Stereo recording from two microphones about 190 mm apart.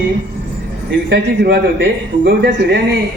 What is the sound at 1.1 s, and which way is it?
A man's voice, 60° right (ahead or behind).